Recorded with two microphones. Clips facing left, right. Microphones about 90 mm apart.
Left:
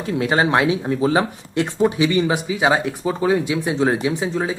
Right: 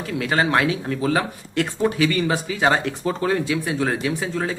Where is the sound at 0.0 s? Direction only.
25° left (ahead or behind).